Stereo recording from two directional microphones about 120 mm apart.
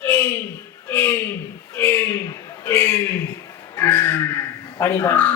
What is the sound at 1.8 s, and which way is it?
A man's voice, 20° left (ahead or behind).